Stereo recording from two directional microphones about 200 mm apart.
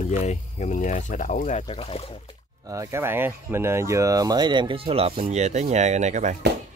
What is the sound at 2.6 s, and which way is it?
Speech, 15° right (ahead or behind).